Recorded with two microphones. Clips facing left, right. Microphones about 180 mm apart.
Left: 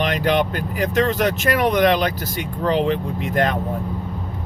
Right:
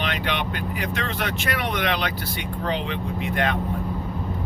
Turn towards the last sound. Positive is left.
turn(degrees=40)  # may be behind; listen again after turning